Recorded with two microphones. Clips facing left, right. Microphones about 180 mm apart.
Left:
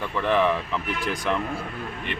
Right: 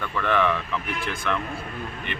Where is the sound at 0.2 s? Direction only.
30° left (ahead or behind).